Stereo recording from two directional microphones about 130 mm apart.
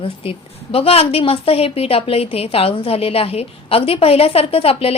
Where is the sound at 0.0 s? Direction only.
45° left (ahead or behind).